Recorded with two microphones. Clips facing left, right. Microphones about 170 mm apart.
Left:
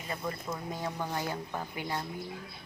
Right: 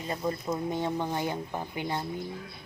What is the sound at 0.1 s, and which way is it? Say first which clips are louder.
Speech: right 5 dB; 25° right (ahead or behind).